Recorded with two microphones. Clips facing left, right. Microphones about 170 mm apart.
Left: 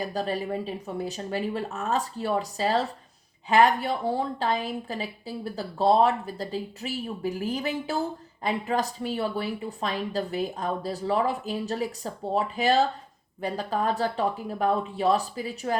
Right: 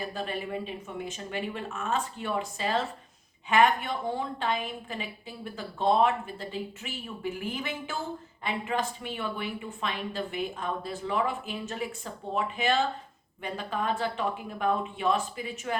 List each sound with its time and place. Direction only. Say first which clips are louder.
0.0 s a woman's voice: left 5 dB; 40° left (ahead or behind)